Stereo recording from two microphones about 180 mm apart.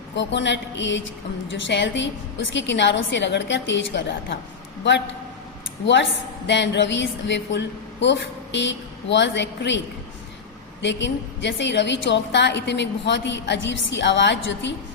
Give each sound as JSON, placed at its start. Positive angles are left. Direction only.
{"t": 0.2, "sound": "a woman's voice", "side_deg": 80}
{"t": 10.8, "sound": "a woman's voice", "side_deg": 85}